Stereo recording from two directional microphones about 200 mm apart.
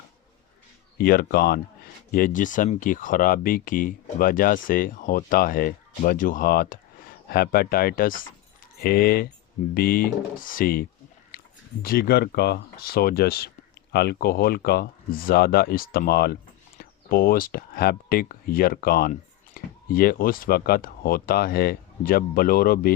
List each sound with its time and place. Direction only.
0.9 s speech: 50° left (ahead or behind)
11.3 s a sound: 50° left (ahead or behind)
11.8 s speech: 50° left (ahead or behind)